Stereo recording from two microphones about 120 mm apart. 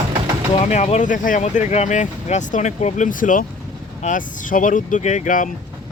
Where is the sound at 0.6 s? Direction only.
70° left (ahead or behind); by 5.5 s 90° left.